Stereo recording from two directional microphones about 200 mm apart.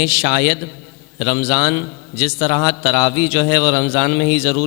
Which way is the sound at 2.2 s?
5° right (ahead or behind).